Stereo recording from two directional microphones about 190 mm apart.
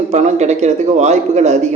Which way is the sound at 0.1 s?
35° right (ahead or behind).